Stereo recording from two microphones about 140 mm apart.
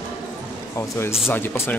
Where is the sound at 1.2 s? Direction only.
15° left (ahead or behind).